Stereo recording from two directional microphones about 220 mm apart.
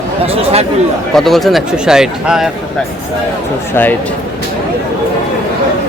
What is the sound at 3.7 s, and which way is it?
Speech, 10° left (ahead or behind).